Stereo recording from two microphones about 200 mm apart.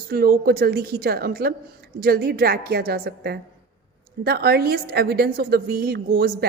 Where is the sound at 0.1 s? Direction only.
50° right (ahead or behind).